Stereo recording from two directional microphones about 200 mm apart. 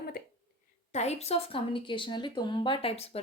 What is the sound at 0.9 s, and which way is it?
Speech, 35° left (ahead or behind).